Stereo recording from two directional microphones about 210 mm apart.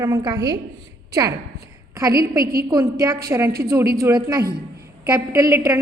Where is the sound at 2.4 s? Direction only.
45° right (ahead or behind).